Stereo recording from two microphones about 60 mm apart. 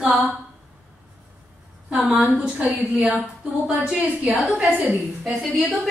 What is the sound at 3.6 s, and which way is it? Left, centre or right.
Speech, centre.